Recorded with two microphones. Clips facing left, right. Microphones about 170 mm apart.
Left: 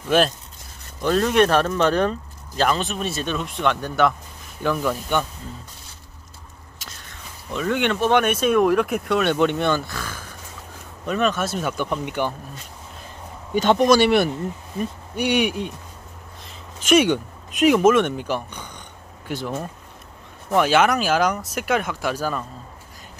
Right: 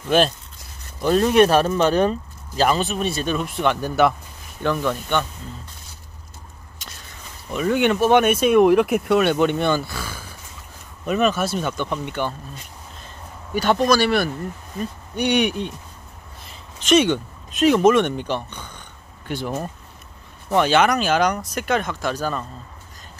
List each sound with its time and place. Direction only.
1.0 s speech: 10° right (ahead or behind)
4.6 s speech: 5° left (ahead or behind)
7.5 s speech: 10° right (ahead or behind)
11.7 s speech: 10° left (ahead or behind)
13.5 s speech: 20° left (ahead or behind)
14.8 s speech: 5° left (ahead or behind)
16.8 s speech: 10° left (ahead or behind)
19.2 s speech: centre (ahead or behind)